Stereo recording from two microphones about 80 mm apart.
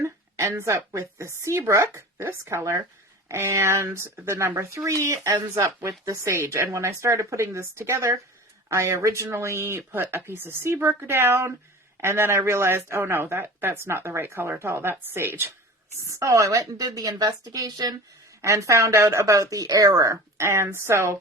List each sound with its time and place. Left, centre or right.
0.0 s a sound: right
0.5 s speech: right
16.0 s a woman's voice: right
18.4 s speech: right